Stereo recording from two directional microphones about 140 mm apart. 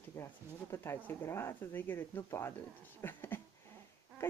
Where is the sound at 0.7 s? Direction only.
20° left (ahead or behind).